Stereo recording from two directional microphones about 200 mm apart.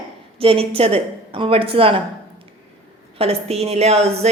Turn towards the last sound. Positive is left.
turn(degrees=-30)  # may be behind; listen again after turning